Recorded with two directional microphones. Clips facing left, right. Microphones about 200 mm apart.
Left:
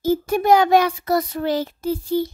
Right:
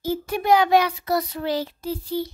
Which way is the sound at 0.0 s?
45° left (ahead or behind).